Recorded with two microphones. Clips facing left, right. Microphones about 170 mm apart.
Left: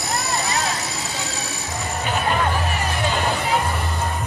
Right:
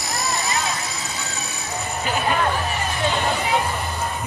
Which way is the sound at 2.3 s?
Centre (ahead or behind).